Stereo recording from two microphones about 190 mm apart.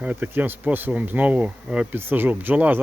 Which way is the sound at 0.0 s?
10° right (ahead or behind).